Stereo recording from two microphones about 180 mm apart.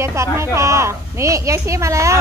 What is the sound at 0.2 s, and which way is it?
A woman's voice, 15° right (ahead or behind).